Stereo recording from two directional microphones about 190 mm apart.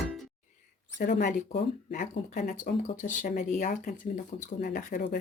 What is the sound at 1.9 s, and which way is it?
Speech, 45° left (ahead or behind).